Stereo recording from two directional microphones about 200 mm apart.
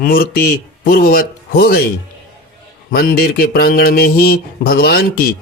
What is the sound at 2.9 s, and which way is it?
Mantra, 50° left (ahead or behind).